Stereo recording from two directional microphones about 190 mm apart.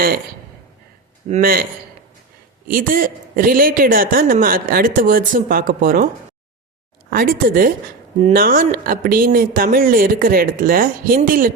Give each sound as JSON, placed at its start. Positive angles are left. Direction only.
{"t": 1.3, "sound": "a man's voice", "side_deg": -50}
{"t": 2.6, "sound": "a man's voice", "side_deg": -50}
{"t": 7.1, "sound": "a man's voice", "side_deg": -50}